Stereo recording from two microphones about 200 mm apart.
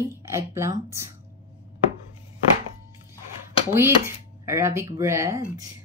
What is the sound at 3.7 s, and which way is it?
Speech, 15° right (ahead or behind).